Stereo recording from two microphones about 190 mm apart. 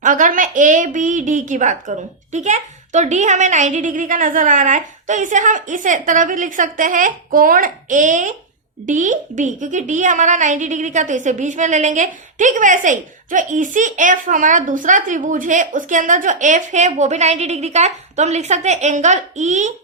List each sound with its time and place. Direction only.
0.0 s a woman's voice: 45° right (ahead or behind)